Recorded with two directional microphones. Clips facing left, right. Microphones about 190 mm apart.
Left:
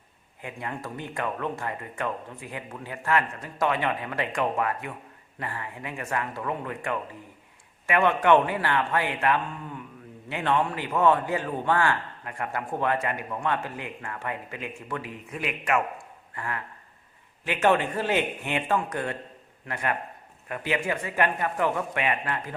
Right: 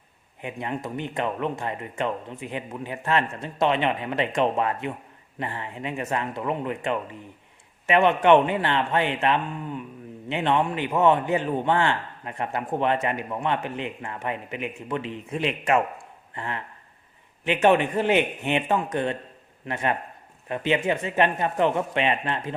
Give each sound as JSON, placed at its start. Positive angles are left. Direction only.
{"t": 0.4, "sound": "a man's voice", "side_deg": -20}